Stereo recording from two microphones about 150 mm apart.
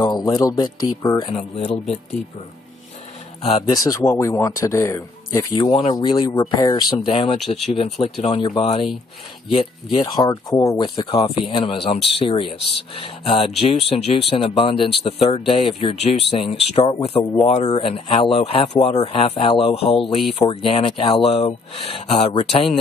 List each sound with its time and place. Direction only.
0.0 s speech: 25° left (ahead or behind)
3.6 s speech: 20° left (ahead or behind)
5.6 s speech: 45° left (ahead or behind)
5.9 s speech: 30° left (ahead or behind)
7.1 s speech: 40° left (ahead or behind)
7.3 s speech: centre (ahead or behind)
7.7 s speech: 40° left (ahead or behind)
10.1 s speech: 25° left (ahead or behind)
17.5 s speech: 45° left (ahead or behind)